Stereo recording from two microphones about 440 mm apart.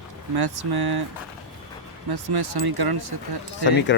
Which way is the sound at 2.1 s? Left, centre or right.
Right.